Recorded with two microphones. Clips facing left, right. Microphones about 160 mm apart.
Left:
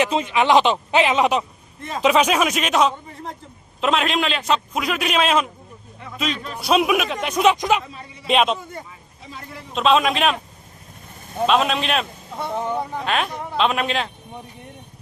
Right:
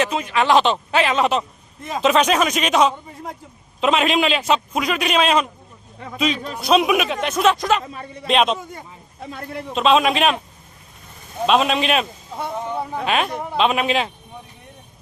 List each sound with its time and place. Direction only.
0.0 s a man's voice: 25° left (ahead or behind); by 7.3 s centre (ahead or behind)
7.3 s speech: 15° left (ahead or behind)
7.9 s a man's voice: 55° right (ahead or behind)
8.3 s a man's voice: 5° left (ahead or behind)
9.2 s speech: 60° right (ahead or behind)
9.7 s a man's voice: centre (ahead or behind)
11.4 s a man's voice: centre (ahead or behind)